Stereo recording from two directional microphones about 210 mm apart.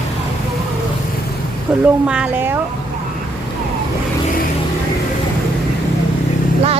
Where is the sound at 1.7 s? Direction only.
5° right (ahead or behind).